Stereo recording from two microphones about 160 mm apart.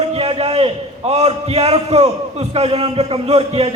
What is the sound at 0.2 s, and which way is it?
A man's voice, 40° right (ahead or behind).